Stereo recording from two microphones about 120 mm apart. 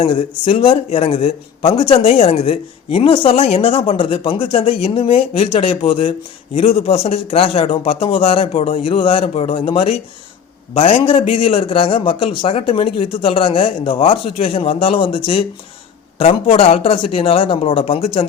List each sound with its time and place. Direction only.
0.0 s speech: 50° left (ahead or behind)